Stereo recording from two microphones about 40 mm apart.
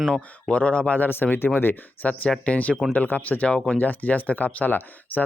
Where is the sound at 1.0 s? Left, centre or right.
Left.